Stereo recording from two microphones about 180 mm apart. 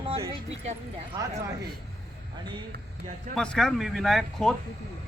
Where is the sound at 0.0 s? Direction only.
30° right (ahead or behind).